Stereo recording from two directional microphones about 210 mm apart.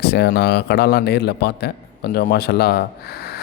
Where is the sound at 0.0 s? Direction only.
50° left (ahead or behind).